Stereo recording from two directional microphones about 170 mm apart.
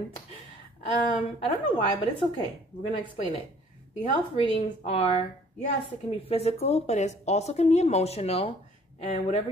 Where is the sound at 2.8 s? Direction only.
35° left (ahead or behind).